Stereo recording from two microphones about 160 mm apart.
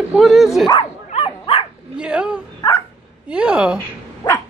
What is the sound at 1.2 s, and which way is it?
Dog, 30° left (ahead or behind).